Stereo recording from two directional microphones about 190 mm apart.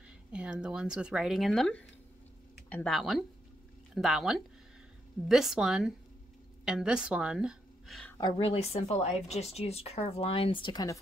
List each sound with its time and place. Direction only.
0.3 s speech: 5° right (ahead or behind)
8.2 s speech: 25° left (ahead or behind)